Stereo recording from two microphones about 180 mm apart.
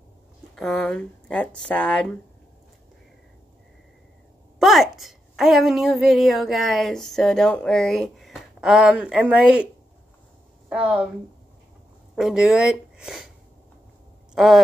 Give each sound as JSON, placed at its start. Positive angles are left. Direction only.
{"t": 0.6, "sound": "a woman's voice", "side_deg": 5}
{"t": 4.6, "sound": "a woman's voice", "side_deg": 0}
{"t": 10.7, "sound": "a woman's voice", "side_deg": -5}
{"t": 12.2, "sound": "speech", "side_deg": -5}
{"t": 14.3, "sound": "speech", "side_deg": 0}